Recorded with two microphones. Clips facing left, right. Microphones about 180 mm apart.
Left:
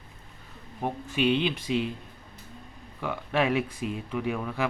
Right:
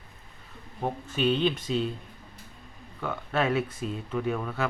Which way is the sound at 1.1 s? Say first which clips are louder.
Even; 10° left (ahead or behind).